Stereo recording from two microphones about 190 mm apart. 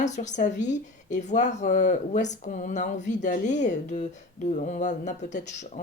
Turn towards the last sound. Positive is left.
turn(degrees=40)  # may be behind; listen again after turning